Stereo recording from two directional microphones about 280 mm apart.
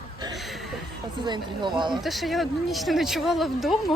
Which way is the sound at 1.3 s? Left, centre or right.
Centre.